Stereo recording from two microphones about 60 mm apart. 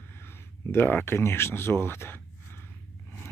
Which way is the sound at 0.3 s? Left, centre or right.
Left.